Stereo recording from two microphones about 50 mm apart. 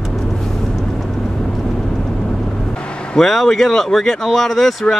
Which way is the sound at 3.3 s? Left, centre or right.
Centre.